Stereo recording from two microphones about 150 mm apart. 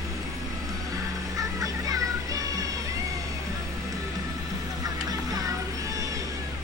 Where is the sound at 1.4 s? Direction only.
25° right (ahead or behind).